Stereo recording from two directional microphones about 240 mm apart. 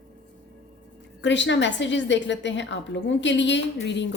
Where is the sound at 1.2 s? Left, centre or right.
Left.